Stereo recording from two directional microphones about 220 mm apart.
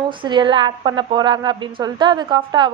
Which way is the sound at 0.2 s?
20° right (ahead or behind).